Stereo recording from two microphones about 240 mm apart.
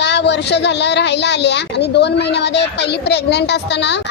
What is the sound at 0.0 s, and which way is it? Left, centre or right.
A woman's voice, left.